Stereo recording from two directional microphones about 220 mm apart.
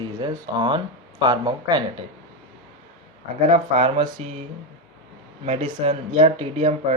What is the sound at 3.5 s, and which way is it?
Speech, 25° right (ahead or behind).